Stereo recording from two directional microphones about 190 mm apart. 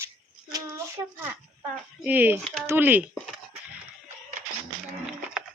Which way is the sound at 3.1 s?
Centre (ahead or behind).